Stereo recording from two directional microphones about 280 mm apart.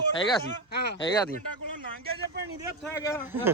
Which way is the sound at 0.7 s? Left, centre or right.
Left.